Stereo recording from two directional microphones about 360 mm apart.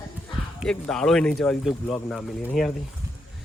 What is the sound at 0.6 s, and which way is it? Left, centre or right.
A woman's voice, centre.